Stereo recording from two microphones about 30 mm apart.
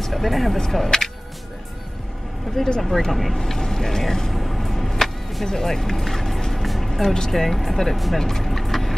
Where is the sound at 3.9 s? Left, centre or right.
Centre.